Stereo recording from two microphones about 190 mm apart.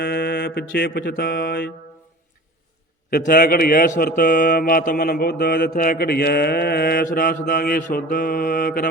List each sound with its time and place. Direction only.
0.0 s music: 60° left (ahead or behind)
3.1 s a man's voice: 50° left (ahead or behind)